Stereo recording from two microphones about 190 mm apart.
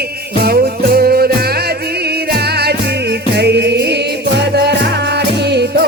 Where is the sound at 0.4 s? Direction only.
55° right (ahead or behind).